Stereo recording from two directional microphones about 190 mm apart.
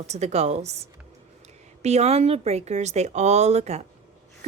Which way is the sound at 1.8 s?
35° right (ahead or behind).